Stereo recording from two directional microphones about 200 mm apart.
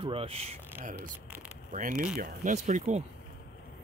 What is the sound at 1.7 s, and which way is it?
Speech, 40° right (ahead or behind).